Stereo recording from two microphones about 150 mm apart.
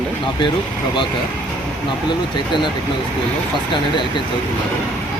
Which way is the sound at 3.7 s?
30° left (ahead or behind).